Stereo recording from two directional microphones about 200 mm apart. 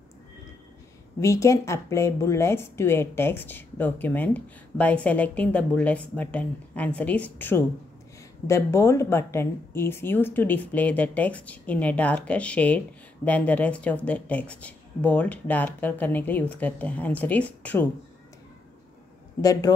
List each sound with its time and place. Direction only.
1.2 s speech: 15° left (ahead or behind)
19.4 s speech: 15° left (ahead or behind)